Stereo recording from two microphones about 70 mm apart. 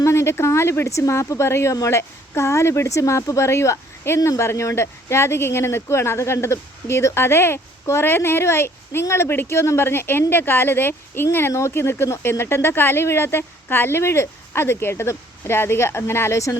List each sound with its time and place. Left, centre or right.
0.0 s speech: left